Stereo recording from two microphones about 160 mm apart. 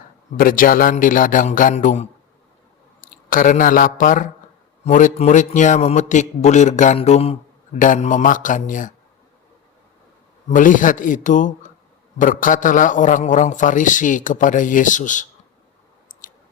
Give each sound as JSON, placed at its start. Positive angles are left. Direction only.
{"t": 0.3, "sound": "a man's voice", "side_deg": 60}
{"t": 3.2, "sound": "a man's voice", "side_deg": 55}
{"t": 10.5, "sound": "a man's voice", "side_deg": 55}